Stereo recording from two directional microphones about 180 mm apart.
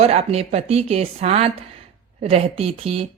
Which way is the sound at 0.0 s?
35° right (ahead or behind).